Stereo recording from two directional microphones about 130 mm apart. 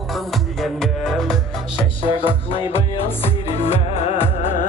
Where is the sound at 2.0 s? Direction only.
40° left (ahead or behind).